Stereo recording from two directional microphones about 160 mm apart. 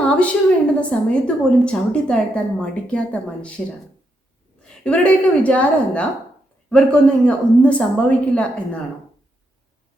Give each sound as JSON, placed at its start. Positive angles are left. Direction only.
{"t": 0.0, "sound": "a woman's voice", "side_deg": 5}
{"t": 4.8, "sound": "a woman's voice", "side_deg": 10}